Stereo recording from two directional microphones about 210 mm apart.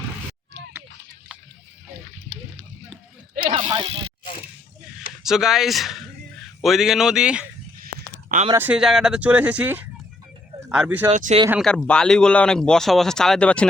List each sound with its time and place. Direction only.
3.4 s a sound: 25° right (ahead or behind)
5.2 s speech: centre (ahead or behind)
8.5 s speech: 5° right (ahead or behind)
11.1 s speech: 30° right (ahead or behind)
11.6 s speech: 5° left (ahead or behind)